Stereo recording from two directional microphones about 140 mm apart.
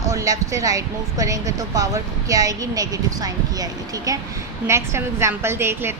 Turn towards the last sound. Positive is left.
turn(degrees=-15)  # may be behind; listen again after turning